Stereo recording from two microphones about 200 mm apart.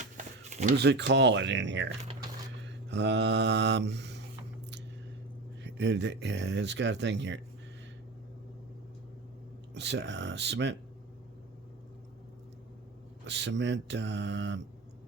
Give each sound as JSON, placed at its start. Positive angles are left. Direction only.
{"t": 0.5, "sound": "speech", "side_deg": -35}
{"t": 0.8, "sound": "speech", "side_deg": -60}
{"t": 2.6, "sound": "mantra", "side_deg": -60}
{"t": 5.6, "sound": "speech", "side_deg": -60}
{"t": 9.7, "sound": "speech", "side_deg": -60}
{"t": 13.2, "sound": "speech", "side_deg": -60}